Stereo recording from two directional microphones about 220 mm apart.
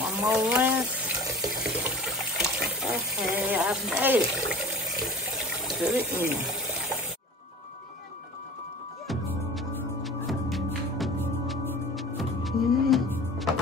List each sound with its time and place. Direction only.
0.0 s water tap: 5° right (ahead or behind)
5.8 s speech: 5° right (ahead or behind)
9.0 s music: centre (ahead or behind)